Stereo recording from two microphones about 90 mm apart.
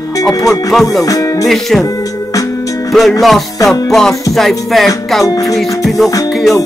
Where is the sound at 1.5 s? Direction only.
Centre (ahead or behind).